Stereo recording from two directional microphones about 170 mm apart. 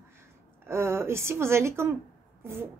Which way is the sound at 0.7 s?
15° right (ahead or behind).